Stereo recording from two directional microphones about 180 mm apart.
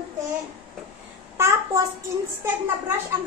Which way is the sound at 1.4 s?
15° right (ahead or behind).